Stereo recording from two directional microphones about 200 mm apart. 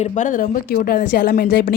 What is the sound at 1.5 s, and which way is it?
Speech, 60° left (ahead or behind).